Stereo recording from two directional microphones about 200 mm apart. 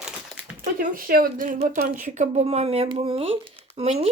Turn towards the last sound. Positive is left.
turn(degrees=-30)  # may be behind; listen again after turning